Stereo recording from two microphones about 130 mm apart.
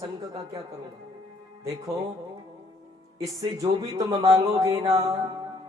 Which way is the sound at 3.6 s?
25° right (ahead or behind).